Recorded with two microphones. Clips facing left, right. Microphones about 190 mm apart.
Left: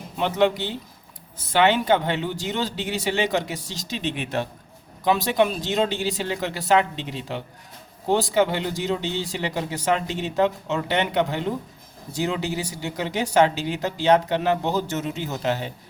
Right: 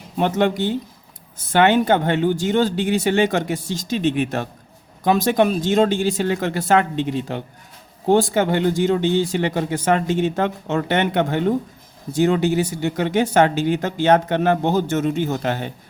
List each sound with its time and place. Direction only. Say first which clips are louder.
0.2 s speech: right 2 dB; 45° right (ahead or behind)